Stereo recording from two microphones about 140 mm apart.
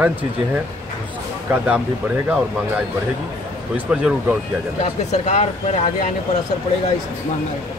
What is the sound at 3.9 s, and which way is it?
Speech, 5° right (ahead or behind).